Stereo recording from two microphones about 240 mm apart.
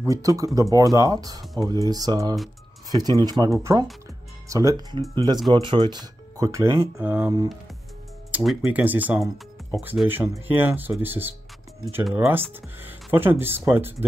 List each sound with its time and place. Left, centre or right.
0.0 s speech: centre
1.4 s speech: centre
1.7 s speech: centre